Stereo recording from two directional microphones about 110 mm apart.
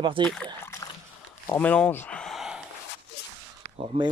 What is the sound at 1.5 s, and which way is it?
Speech, 15° left (ahead or behind).